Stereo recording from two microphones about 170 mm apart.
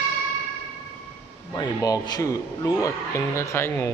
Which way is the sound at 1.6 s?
20° left (ahead or behind).